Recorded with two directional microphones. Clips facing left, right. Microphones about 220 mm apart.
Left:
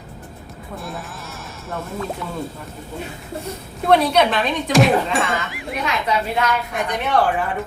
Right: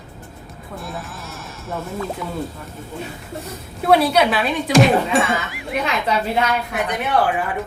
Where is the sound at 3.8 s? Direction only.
5° right (ahead or behind).